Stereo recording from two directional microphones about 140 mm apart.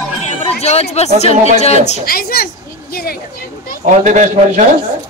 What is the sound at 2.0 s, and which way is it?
A woman's voice, 90° left.